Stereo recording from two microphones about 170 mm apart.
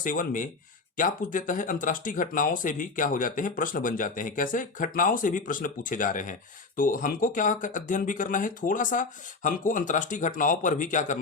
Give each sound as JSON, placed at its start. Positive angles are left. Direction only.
{"t": 0.0, "sound": "speech", "side_deg": 50}